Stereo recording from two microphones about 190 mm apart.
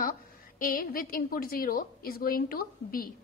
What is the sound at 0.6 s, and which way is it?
A woman's voice, 50° left (ahead or behind).